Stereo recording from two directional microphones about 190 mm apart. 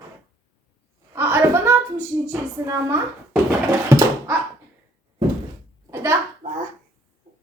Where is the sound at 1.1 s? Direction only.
15° right (ahead or behind).